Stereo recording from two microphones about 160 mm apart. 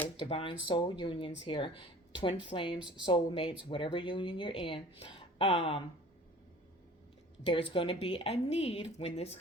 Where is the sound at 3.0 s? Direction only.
35° left (ahead or behind).